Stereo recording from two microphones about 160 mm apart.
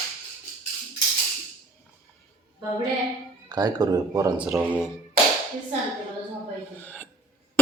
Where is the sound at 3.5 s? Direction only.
25° right (ahead or behind).